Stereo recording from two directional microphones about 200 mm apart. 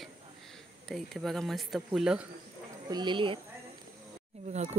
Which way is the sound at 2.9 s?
25° right (ahead or behind).